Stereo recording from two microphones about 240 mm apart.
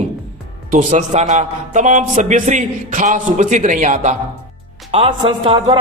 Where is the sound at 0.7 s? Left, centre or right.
Right.